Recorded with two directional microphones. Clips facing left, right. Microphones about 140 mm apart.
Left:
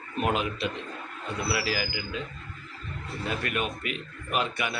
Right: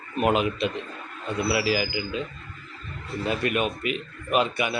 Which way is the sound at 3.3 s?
20° right (ahead or behind).